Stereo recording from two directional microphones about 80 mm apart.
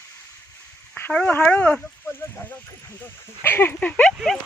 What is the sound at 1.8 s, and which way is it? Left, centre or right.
Speech, left.